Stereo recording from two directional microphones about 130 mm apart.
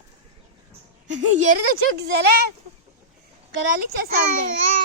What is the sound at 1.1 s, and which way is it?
Speech, 65° right (ahead or behind).